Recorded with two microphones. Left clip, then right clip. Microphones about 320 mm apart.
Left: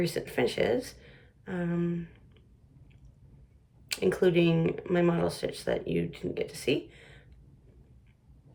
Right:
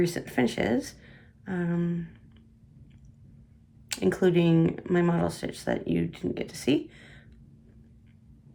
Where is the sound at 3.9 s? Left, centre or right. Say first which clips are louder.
Right 1 dB; centre.